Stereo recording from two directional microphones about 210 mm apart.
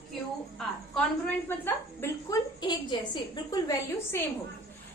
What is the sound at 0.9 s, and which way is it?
A woman's voice, 5° left (ahead or behind).